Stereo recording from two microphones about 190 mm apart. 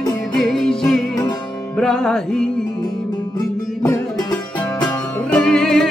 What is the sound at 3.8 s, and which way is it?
Music, 20° left (ahead or behind).